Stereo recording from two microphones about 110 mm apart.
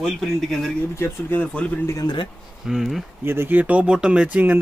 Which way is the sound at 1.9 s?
40° left (ahead or behind).